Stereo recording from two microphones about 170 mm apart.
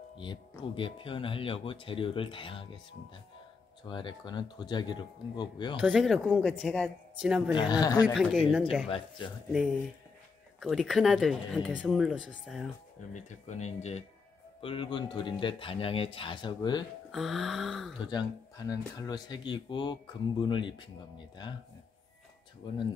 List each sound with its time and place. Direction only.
0.2 s speech: 30° left (ahead or behind)
3.8 s speech: 25° left (ahead or behind)
5.8 s speech: centre (ahead or behind)
7.7 s speech: 25° left (ahead or behind)
8.0 s speech: centre (ahead or behind)
10.6 s speech: centre (ahead or behind)
13.1 s speech: 45° left (ahead or behind)
14.6 s speech: 30° left (ahead or behind)
17.1 s speech: centre (ahead or behind)
18.0 s speech: 25° left (ahead or behind)